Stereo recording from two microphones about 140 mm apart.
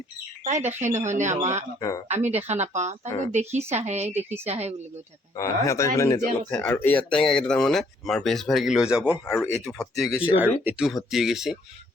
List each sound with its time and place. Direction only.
0.4 s speech: 55° right (ahead or behind)
5.4 s speech: 20° left (ahead or behind)
6.5 s speech: 10° left (ahead or behind); by 9.2 s 5° right (ahead or behind)
9.2 s speech: 15° left (ahead or behind)
9.6 s speech: centre (ahead or behind)
10.3 s speech: 15° right (ahead or behind)
10.8 s speech: 5° right (ahead or behind)